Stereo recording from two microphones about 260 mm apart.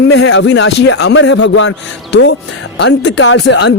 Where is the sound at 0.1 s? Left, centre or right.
Left.